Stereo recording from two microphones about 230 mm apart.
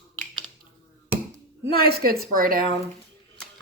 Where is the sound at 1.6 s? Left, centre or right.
Right.